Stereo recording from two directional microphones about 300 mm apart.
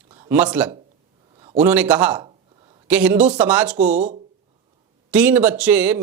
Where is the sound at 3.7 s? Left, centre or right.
Right.